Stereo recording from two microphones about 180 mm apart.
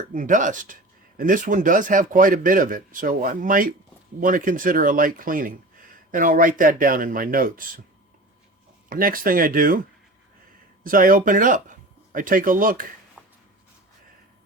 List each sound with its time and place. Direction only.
0.1 s speech: 45° right (ahead or behind)
8.9 s speech: 50° right (ahead or behind)
10.8 s speech: 50° right (ahead or behind)
13.2 s a sound: centre (ahead or behind)